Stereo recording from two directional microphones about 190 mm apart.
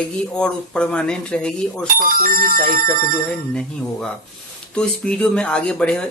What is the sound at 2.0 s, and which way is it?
Speech, 50° right (ahead or behind).